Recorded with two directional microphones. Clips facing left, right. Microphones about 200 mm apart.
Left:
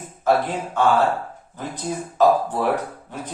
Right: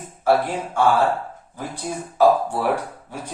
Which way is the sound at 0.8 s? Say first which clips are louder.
Even; 10° right (ahead or behind).